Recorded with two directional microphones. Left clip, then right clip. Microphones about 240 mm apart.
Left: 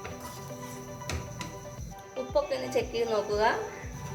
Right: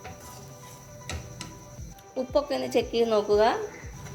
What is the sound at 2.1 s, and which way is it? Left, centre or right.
Speech, right.